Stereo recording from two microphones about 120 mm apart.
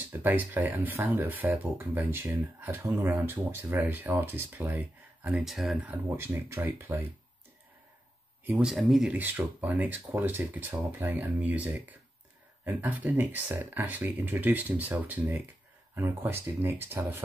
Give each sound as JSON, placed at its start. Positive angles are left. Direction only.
{"t": 0.2, "sound": "speech", "side_deg": -15}
{"t": 5.4, "sound": "speech", "side_deg": 0}
{"t": 5.9, "sound": "speech", "side_deg": -20}
{"t": 8.5, "sound": "speech", "side_deg": -5}
{"t": 9.1, "sound": "speech", "side_deg": -15}